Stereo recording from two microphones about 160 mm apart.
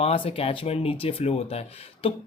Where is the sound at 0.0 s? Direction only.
40° left (ahead or behind).